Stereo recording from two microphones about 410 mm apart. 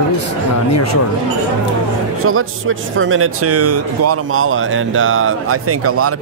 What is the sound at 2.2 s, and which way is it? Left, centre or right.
A man's voice, right.